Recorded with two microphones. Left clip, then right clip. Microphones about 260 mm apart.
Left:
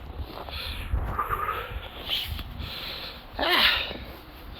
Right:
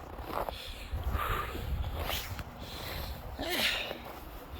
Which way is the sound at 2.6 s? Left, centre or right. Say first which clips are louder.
Left 7 dB; centre.